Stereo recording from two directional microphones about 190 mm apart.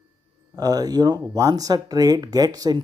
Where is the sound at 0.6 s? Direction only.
20° right (ahead or behind).